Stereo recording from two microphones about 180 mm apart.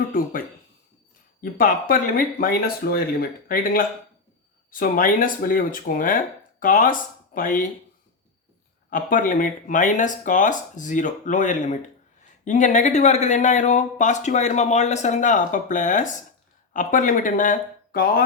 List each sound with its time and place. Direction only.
1.4 s speech: 50° left (ahead or behind)
8.9 s speech: 50° left (ahead or behind)